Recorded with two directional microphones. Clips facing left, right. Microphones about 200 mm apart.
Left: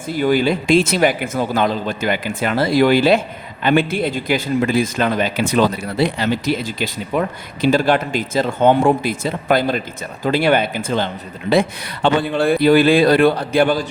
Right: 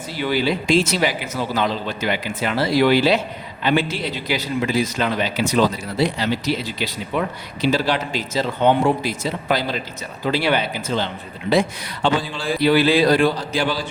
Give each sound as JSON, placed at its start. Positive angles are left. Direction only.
{"t": 0.1, "sound": "a man's voice", "side_deg": 50}